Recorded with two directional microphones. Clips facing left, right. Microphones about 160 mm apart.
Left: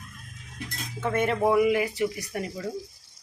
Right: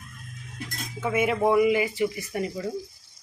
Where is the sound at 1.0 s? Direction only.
10° right (ahead or behind).